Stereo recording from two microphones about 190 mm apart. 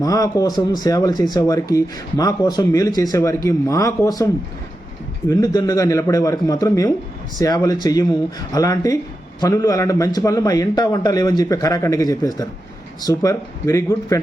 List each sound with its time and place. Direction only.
0.0 s speech: 20° left (ahead or behind)
5.3 s a man's voice: 20° left (ahead or behind)